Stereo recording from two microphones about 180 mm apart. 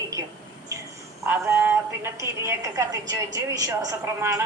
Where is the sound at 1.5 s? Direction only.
15° right (ahead or behind).